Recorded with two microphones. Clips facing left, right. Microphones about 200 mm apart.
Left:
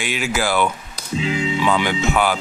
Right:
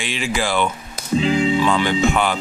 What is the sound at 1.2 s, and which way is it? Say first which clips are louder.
Speech: right 4 dB; 30° right (ahead or behind).